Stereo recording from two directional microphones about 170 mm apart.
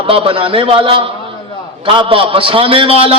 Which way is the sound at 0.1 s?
35° right (ahead or behind).